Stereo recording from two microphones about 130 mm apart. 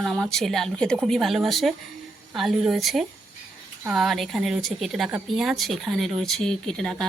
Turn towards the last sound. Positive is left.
turn(degrees=5)  # may be behind; listen again after turning